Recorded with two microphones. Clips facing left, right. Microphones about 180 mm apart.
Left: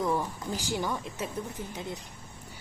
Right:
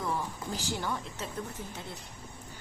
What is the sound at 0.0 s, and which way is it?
A woman's voice, 15° left (ahead or behind).